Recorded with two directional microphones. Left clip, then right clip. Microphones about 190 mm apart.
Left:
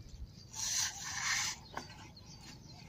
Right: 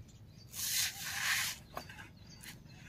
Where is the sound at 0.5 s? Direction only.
45° right (ahead or behind).